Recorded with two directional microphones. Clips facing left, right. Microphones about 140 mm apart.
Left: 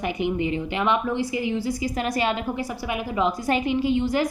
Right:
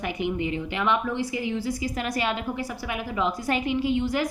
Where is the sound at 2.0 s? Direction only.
25° left (ahead or behind).